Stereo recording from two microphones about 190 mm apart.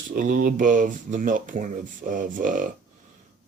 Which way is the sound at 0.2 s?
45° right (ahead or behind).